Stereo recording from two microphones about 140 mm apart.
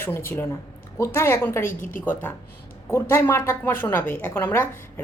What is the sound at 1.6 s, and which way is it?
Speech, 70° left (ahead or behind).